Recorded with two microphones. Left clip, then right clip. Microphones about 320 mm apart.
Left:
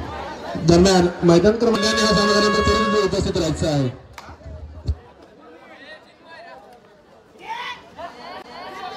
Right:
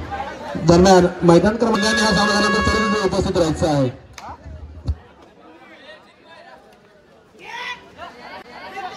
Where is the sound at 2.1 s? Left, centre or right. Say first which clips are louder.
Even; centre.